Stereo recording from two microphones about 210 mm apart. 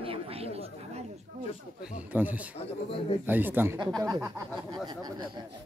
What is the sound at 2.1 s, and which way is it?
Speech, 10° right (ahead or behind).